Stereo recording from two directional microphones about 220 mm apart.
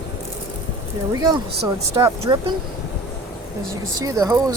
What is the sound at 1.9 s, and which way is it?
Speech, 20° right (ahead or behind).